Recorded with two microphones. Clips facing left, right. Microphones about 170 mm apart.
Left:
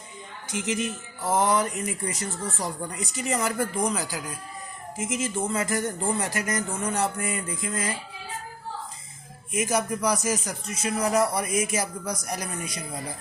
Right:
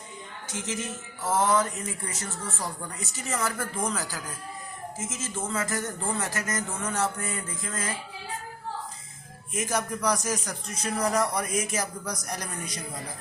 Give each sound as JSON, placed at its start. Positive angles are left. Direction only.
{"t": 0.5, "sound": "speech", "side_deg": 15}
{"t": 9.5, "sound": "speech", "side_deg": 10}